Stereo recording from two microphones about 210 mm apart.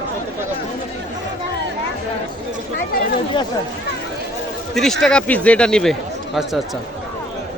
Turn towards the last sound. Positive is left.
turn(degrees=0)  # may be behind; listen again after turning